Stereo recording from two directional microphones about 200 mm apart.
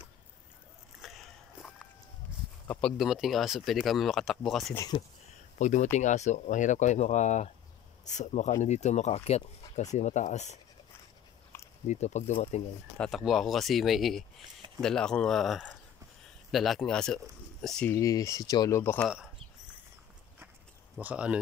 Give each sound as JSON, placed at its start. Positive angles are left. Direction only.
{"t": 1.0, "sound": "biting", "side_deg": 0}
{"t": 2.7, "sound": "speech", "side_deg": 0}
{"t": 4.7, "sound": "speech", "side_deg": 20}
{"t": 5.6, "sound": "speech", "side_deg": 35}
{"t": 11.9, "sound": "speech", "side_deg": 35}
{"t": 12.9, "sound": "speech", "side_deg": 0}
{"t": 21.0, "sound": "speech", "side_deg": -5}